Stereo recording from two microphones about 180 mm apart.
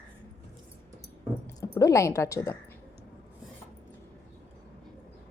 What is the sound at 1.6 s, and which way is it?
Speech, 20° left (ahead or behind).